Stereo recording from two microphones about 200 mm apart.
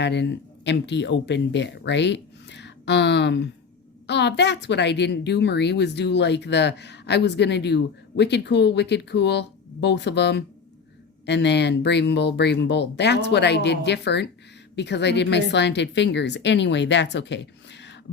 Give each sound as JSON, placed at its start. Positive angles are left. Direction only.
{"t": 0.0, "sound": "a woman's voice", "side_deg": 60}